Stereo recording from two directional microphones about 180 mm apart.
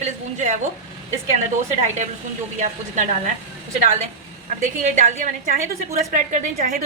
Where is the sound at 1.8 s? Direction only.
40° right (ahead or behind).